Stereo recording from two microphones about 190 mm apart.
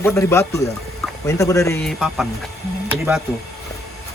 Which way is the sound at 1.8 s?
Centre (ahead or behind).